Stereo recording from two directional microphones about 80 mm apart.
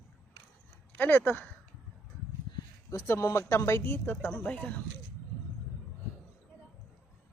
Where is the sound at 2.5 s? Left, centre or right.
Left.